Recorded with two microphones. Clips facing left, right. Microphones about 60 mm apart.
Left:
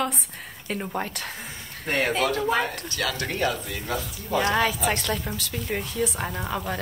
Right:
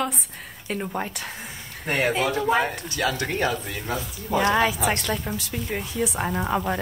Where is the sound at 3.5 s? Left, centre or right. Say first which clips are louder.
Right 1 dB; right.